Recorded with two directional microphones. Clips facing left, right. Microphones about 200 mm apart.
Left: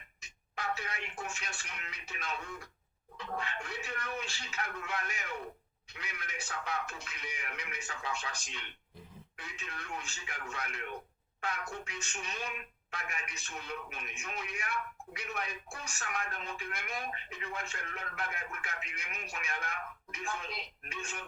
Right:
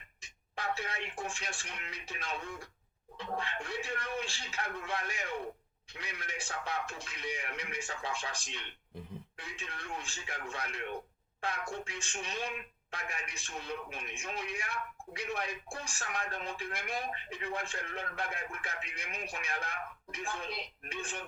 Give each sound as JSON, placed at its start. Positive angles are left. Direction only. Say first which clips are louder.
{"t": 0.2, "sound": "speech", "louder": "even", "side_deg": -30}